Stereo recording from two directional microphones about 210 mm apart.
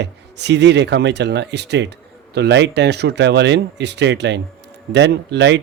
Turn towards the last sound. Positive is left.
turn(degrees=-55)  # may be behind; listen again after turning